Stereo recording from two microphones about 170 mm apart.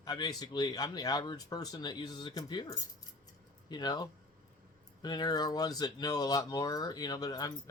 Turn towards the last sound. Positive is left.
turn(degrees=25)  # may be behind; listen again after turning